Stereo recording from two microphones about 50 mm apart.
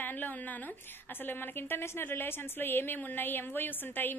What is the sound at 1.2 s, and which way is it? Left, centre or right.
A woman's voice, left.